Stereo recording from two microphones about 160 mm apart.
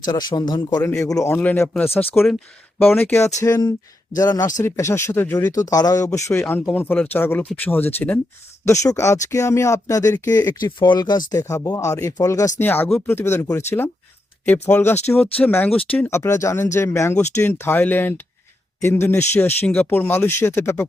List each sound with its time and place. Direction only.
0.0 s speech: 25° left (ahead or behind)
3.4 s speech: 25° left (ahead or behind)